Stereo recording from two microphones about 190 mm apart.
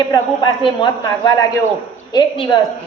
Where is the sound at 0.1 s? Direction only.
25° left (ahead or behind).